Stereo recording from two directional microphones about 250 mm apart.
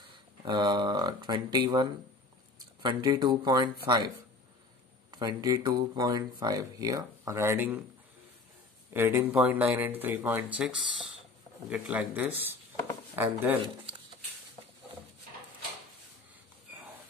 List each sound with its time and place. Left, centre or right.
0.5 s speech: centre
5.2 s speech: centre
8.9 s speech: centre